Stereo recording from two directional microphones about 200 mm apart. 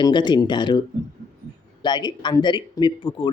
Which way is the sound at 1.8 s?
20° left (ahead or behind).